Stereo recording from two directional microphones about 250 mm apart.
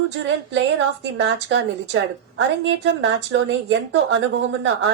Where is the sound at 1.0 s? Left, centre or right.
Right.